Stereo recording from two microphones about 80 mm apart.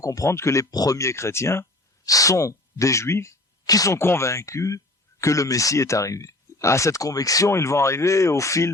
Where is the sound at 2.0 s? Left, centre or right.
Left.